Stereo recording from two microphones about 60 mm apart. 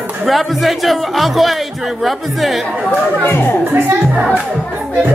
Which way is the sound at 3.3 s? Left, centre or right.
Left.